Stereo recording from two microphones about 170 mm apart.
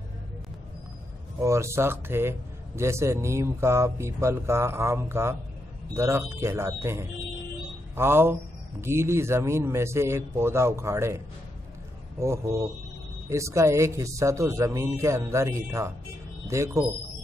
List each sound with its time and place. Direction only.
1.4 s speech: 15° right (ahead or behind)